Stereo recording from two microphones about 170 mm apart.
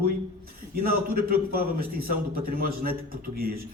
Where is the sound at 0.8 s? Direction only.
60° right (ahead or behind).